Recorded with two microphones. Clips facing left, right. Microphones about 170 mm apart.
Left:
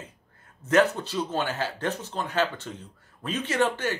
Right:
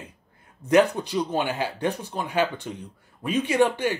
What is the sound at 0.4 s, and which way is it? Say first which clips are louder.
Speech: right 3 dB; 15° right (ahead or behind).